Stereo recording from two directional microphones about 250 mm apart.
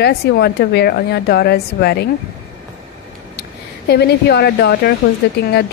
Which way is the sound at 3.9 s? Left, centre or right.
Left.